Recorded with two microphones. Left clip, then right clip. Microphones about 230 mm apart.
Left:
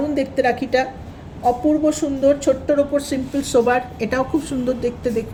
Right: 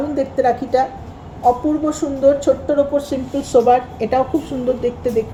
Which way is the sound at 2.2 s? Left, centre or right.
Left.